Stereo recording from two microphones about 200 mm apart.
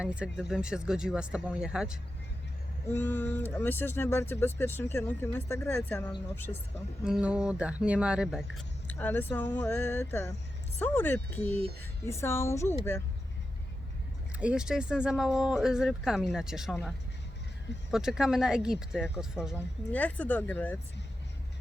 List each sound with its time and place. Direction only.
0.0 s speech: 5° right (ahead or behind)
2.9 s speech: 10° left (ahead or behind)
6.5 s speech: 30° left (ahead or behind)
7.0 s speech: 5° right (ahead or behind); by 12.6 s 15° left (ahead or behind)
14.3 s speech: 5° right (ahead or behind)
17.9 s speech: centre (ahead or behind)
19.9 s speech: 10° left (ahead or behind)